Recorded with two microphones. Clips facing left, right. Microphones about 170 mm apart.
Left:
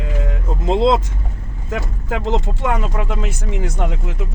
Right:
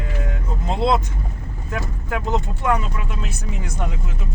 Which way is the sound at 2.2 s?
90° left.